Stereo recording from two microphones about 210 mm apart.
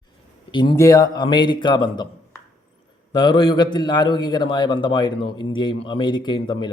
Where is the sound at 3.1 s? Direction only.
20° left (ahead or behind).